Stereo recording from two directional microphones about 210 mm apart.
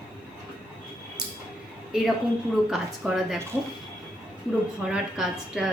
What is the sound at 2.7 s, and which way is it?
Speech, centre (ahead or behind).